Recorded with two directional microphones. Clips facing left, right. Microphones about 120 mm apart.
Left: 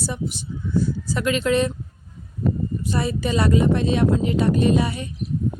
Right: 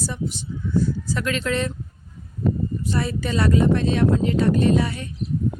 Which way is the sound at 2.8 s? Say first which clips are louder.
Left 1 dB; 15° left (ahead or behind).